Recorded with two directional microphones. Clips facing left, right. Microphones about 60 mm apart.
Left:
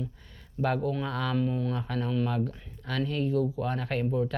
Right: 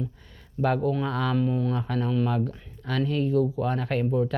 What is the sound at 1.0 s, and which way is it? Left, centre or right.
Speech, right.